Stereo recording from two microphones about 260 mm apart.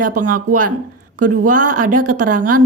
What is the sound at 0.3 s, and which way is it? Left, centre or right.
Speech, right.